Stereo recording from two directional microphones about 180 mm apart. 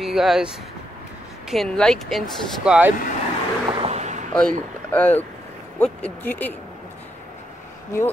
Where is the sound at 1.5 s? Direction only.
Centre (ahead or behind).